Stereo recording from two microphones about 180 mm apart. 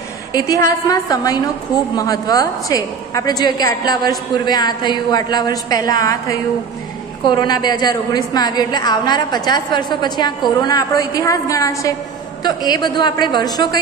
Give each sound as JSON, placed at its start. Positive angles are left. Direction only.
{"t": 0.3, "sound": "a woman's voice", "side_deg": 20}
{"t": 7.2, "sound": "a woman's voice", "side_deg": 20}